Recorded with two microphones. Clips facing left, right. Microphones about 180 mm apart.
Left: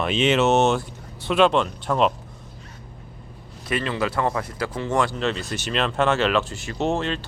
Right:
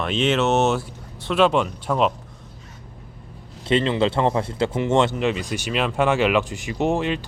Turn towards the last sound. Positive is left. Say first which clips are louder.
# right 2 dB
turn(degrees=-15)  # may be behind; listen again after turning